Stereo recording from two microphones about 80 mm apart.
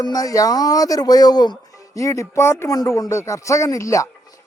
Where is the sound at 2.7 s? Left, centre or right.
Left.